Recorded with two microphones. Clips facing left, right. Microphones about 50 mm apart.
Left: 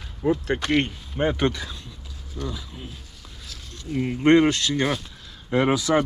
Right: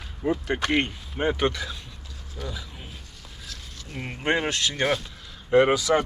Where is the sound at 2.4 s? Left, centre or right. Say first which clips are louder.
Left 3 dB; centre.